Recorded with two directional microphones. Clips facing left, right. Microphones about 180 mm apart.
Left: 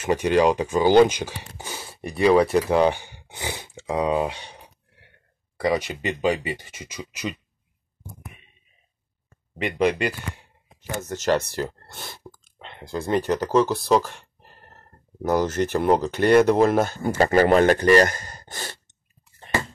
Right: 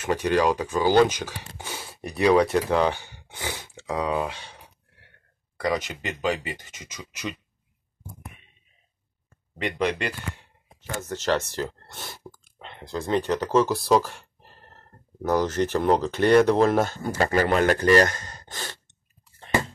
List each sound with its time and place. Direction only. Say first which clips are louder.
0.0 s speech: left 3 dB; 15° left (ahead or behind)
1.7 s speech: left 2 dB; centre (ahead or behind)
2.7 s a sound: left 3 dB; 15° left (ahead or behind)
5.6 s speech: left 3 dB; 15° left (ahead or behind)
9.6 s speech: left 4 dB; 10° left (ahead or behind)
17.2 s speech: left 5 dB; 40° left (ahead or behind)
17.6 s speech: left 2 dB; 15° left (ahead or behind)